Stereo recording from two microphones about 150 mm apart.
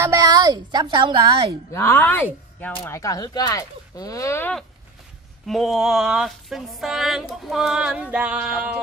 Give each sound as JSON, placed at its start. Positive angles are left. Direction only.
{"t": 0.0, "sound": "a woman's voice", "side_deg": -20}
{"t": 1.7, "sound": "a woman's voice", "side_deg": 15}
{"t": 5.5, "sound": "a sound", "side_deg": 0}